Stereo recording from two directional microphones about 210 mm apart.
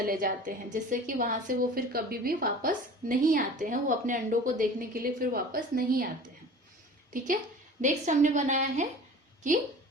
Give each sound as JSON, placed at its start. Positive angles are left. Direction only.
{"t": 0.0, "sound": "a woman's voice", "side_deg": -45}
{"t": 7.8, "sound": "a woman's voice", "side_deg": -35}